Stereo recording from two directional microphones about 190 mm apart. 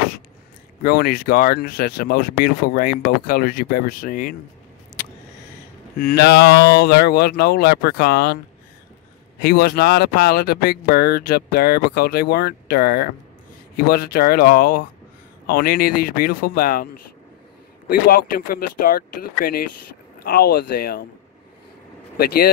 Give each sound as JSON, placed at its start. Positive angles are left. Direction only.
{"t": 0.8, "sound": "speech", "side_deg": 50}
{"t": 5.9, "sound": "speech", "side_deg": 55}
{"t": 9.4, "sound": "speech", "side_deg": 55}
{"t": 22.1, "sound": "speech", "side_deg": 55}